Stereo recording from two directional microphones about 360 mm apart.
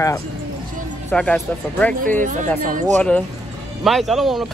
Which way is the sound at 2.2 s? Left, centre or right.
Centre.